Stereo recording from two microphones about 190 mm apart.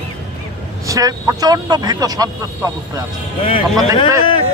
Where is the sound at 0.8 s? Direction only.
15° right (ahead or behind).